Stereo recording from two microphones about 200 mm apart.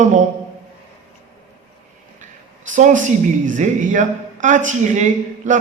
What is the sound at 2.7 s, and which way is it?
Speech, 40° right (ahead or behind).